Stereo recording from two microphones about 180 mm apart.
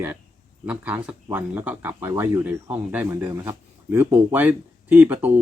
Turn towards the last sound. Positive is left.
turn(degrees=-10)  # may be behind; listen again after turning